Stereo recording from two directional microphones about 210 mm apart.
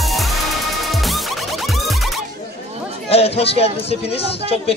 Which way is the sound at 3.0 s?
30° left (ahead or behind).